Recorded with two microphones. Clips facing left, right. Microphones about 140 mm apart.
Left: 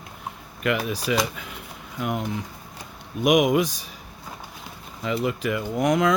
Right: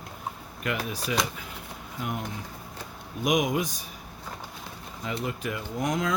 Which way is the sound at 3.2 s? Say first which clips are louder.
Left 6 dB; 70° left (ahead or behind).